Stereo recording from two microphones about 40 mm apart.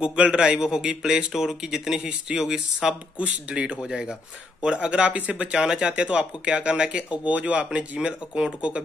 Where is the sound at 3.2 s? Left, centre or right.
Right.